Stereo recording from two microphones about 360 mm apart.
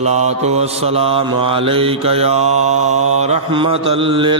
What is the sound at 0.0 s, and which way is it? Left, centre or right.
Mantra, centre.